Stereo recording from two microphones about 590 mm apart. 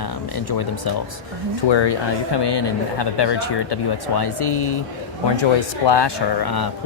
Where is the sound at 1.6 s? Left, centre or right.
Left.